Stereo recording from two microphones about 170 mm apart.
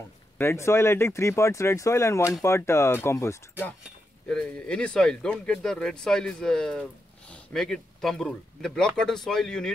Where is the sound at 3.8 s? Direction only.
5° left (ahead or behind).